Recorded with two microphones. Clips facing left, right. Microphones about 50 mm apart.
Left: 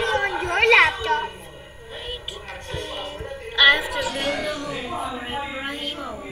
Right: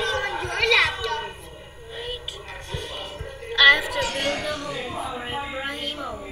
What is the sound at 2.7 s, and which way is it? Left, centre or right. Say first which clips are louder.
Music: left 3 dB; centre.